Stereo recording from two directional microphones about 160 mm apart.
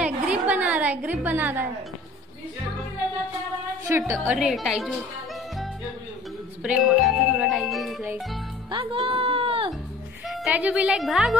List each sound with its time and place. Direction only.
0.0 s a sound: 10° right (ahead or behind)
4.1 s a woman's voice: 15° right (ahead or behind)
4.4 s speech: 5° right (ahead or behind)
6.6 s speech: centre (ahead or behind)
8.6 s speech: 30° right (ahead or behind)
10.2 s a woman's voice: centre (ahead or behind)